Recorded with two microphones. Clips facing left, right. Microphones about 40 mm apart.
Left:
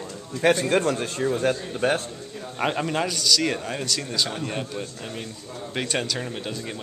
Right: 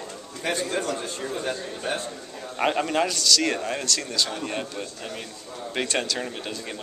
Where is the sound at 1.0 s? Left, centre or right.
Left.